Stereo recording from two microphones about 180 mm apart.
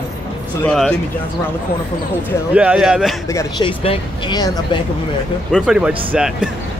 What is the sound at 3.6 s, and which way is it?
Speech, 30° left (ahead or behind).